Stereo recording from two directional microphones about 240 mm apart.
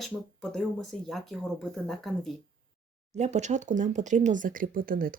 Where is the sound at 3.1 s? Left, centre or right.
Right.